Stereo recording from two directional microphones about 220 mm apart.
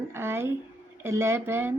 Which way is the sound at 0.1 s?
10° right (ahead or behind).